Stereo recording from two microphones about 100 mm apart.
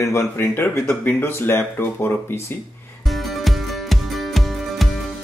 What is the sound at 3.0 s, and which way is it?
Music, centre (ahead or behind).